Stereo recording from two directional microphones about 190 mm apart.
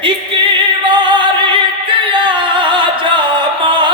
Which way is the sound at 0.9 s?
25° right (ahead or behind).